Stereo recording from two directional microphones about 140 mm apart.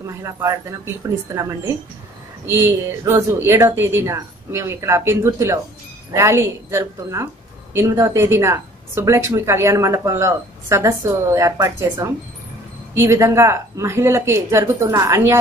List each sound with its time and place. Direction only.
0.0 s a woman's voice: 20° right (ahead or behind)